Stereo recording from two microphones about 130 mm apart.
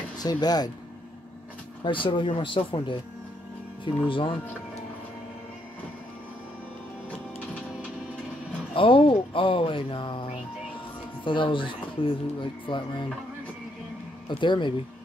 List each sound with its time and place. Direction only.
0.2 s speech: 30° left (ahead or behind)
1.9 s speech: 40° left (ahead or behind)
4.1 s speech: 40° left (ahead or behind)
8.7 s speech: 45° left (ahead or behind)
14.4 s speech: 40° left (ahead or behind)